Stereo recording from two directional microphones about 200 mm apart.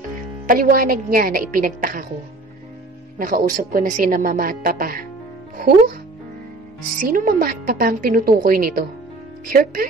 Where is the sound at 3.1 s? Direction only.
40° right (ahead or behind).